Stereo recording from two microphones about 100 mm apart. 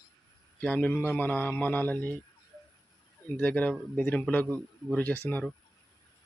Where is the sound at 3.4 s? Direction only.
15° left (ahead or behind).